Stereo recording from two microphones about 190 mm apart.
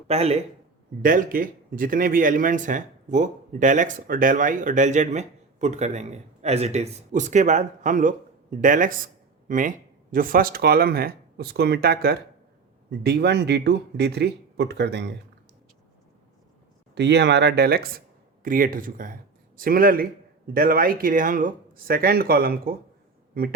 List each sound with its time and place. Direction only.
0.1 s speech: 35° right (ahead or behind)
1.0 s a man's voice: 45° right (ahead or behind); by 15.1 s 65° right (ahead or behind)
16.9 s a man's voice: 65° right (ahead or behind)